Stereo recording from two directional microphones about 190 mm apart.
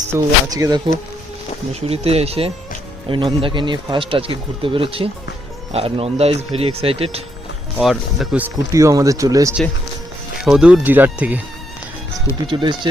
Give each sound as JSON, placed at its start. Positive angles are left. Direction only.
{"t": 0.1, "sound": "speech", "side_deg": -20}
{"t": 1.7, "sound": "speech", "side_deg": -30}
{"t": 7.8, "sound": "speech", "side_deg": 0}
{"t": 10.4, "sound": "speech", "side_deg": -5}
{"t": 12.5, "sound": "speech", "side_deg": -25}